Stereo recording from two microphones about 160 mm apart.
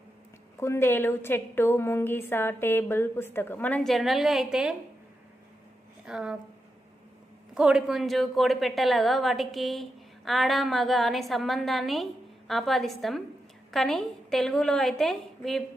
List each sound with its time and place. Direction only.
0.5 s a woman's voice: 15° left (ahead or behind); by 4.8 s 5° right (ahead or behind)
6.1 s a woman's voice: 5° right (ahead or behind)
7.5 s a woman's voice: 5° right (ahead or behind)